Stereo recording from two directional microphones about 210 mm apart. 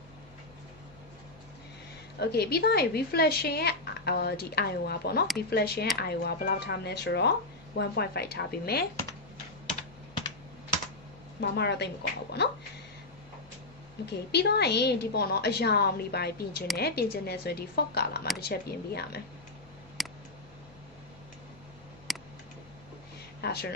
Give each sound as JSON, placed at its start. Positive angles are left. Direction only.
{"t": 2.1, "sound": "speech", "side_deg": 50}
{"t": 11.5, "sound": "speech", "side_deg": 55}
{"t": 14.0, "sound": "speech", "side_deg": 50}
{"t": 20.0, "sound": "a sound", "side_deg": 0}
{"t": 22.1, "sound": "tick", "side_deg": 0}
{"t": 23.4, "sound": "a sound", "side_deg": 50}